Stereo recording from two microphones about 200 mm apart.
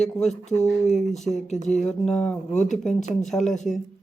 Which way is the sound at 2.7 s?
5° left (ahead or behind).